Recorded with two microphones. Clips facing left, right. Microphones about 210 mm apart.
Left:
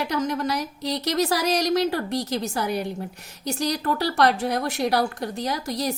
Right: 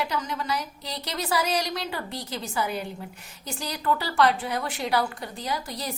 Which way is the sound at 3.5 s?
40° left (ahead or behind).